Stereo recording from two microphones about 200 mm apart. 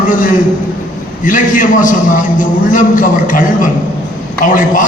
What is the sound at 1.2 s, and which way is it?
A man's voice, 40° left (ahead or behind).